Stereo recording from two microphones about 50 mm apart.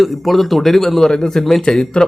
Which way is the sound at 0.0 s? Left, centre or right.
Centre.